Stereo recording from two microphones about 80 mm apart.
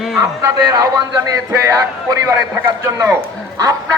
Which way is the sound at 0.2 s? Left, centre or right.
Right.